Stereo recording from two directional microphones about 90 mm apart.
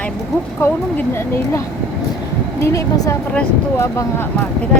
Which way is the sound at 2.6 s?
35° left (ahead or behind).